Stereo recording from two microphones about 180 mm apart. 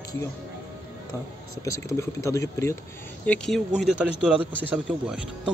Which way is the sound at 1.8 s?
15° left (ahead or behind).